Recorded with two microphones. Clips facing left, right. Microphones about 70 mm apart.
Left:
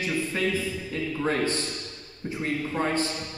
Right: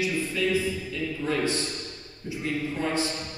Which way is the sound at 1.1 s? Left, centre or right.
Left.